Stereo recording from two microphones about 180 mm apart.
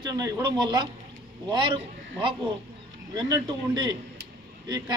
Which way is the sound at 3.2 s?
25° right (ahead or behind).